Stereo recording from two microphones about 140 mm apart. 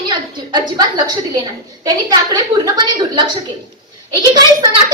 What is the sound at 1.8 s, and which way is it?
Speech, 25° right (ahead or behind).